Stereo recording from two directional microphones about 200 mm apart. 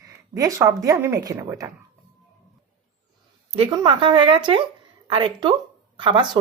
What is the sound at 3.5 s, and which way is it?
A woman's voice, 25° right (ahead or behind).